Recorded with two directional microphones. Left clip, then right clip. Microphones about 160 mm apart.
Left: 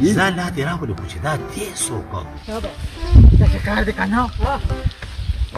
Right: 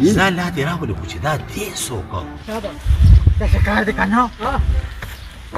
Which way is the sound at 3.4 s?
Centre (ahead or behind).